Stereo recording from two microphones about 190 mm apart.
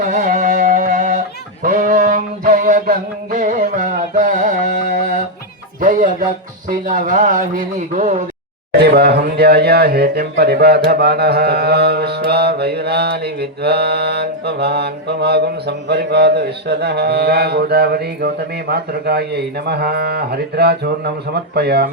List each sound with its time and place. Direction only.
0.0 s music: 45° right (ahead or behind)
5.8 s a man's voice: 40° right (ahead or behind)
8.7 s mantra: 60° right (ahead or behind)